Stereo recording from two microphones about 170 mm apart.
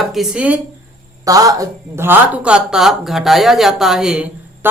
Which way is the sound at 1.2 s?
20° right (ahead or behind).